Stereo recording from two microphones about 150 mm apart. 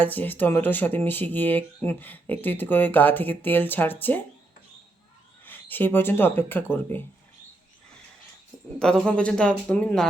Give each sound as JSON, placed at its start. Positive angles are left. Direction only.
{"t": 0.0, "sound": "speech", "side_deg": 10}
{"t": 5.5, "sound": "speech", "side_deg": 10}
{"t": 8.8, "sound": "speech", "side_deg": 5}